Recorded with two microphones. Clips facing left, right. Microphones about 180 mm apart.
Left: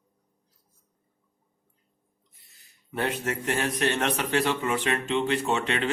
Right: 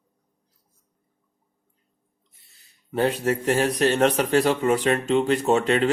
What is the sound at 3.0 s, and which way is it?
A man's voice, 35° right (ahead or behind).